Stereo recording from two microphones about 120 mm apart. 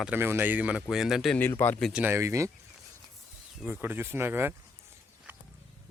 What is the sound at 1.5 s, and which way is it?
Speech, 15° left (ahead or behind).